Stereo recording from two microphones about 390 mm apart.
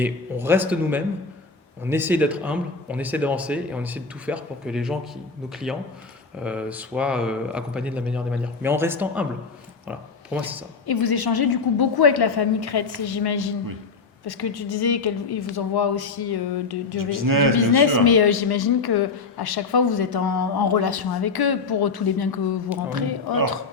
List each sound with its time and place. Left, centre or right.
0.0 s speech: centre
6.4 s speech: centre
9.8 s a sound: centre
10.8 s speech: left
17.0 s speech: right
17.6 s speech: left